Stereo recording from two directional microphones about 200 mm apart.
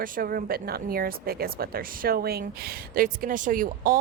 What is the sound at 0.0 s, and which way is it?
Speech, 45° right (ahead or behind).